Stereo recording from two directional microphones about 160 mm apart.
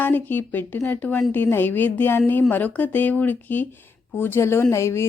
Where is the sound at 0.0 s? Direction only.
15° left (ahead or behind).